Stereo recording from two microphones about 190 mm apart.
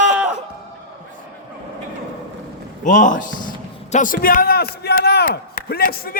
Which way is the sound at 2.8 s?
40° left (ahead or behind).